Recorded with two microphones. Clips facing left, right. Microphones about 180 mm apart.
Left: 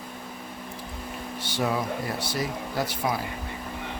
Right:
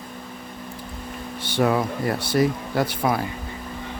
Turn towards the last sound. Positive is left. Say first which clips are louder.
# right 5 dB
turn(degrees=-60)  # may be behind; listen again after turning